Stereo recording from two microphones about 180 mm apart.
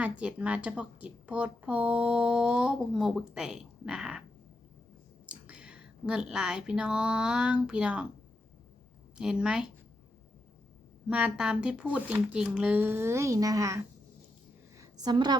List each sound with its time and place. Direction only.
0.0 s a woman's voice: 5° right (ahead or behind)
5.2 s speech: 5° right (ahead or behind)
9.1 s a woman's voice: 5° right (ahead or behind)
11.1 s speech: 5° right (ahead or behind)
14.8 s a sound: 20° right (ahead or behind)